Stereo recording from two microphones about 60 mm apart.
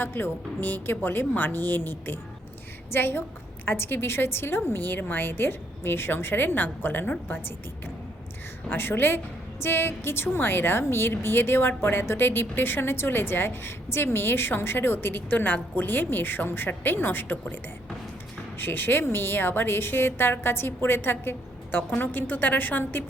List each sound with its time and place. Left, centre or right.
0.0 s a woman's voice: left
8.7 s a woman's voice: left
18.5 s a woman's voice: left